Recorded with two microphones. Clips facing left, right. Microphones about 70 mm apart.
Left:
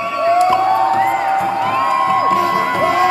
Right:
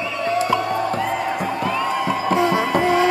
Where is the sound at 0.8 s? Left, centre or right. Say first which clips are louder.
Left 7 dB; left.